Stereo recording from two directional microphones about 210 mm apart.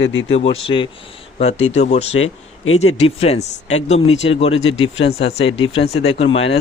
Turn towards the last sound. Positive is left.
turn(degrees=30)  # may be behind; listen again after turning